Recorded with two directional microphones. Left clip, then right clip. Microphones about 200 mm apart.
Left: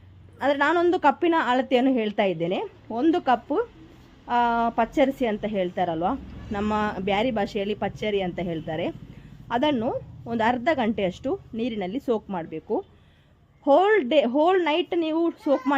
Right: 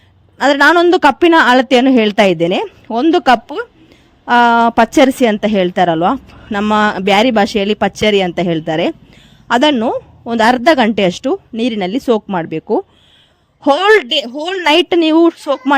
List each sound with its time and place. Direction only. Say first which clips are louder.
0.3 s a woman's voice: right 13 dB; 50° right (ahead or behind)